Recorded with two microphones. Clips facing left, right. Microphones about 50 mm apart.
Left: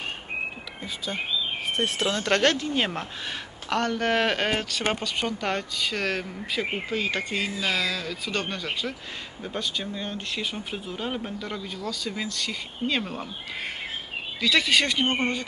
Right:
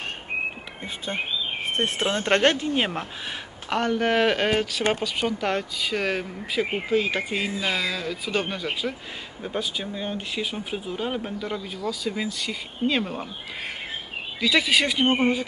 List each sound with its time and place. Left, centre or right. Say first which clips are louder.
0.8 s speech: right 1 dB; right; by 13.3 s centre
14.4 s speech: right 1 dB; centre